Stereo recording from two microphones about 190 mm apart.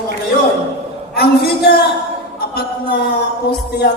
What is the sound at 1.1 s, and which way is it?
Speech, 55° left (ahead or behind).